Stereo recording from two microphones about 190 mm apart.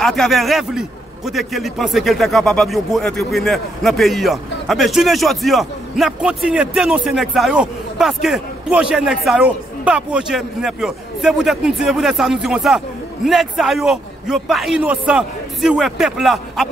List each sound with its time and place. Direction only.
0.0 s a man's voice: centre (ahead or behind)